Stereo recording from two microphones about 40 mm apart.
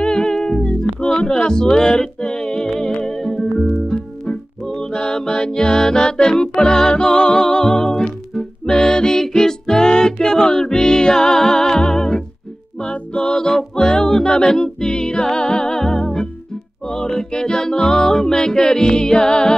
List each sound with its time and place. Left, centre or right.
0.0 s music: centre